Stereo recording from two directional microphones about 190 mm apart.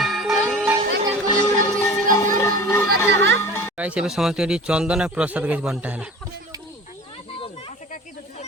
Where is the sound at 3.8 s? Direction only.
5° right (ahead or behind).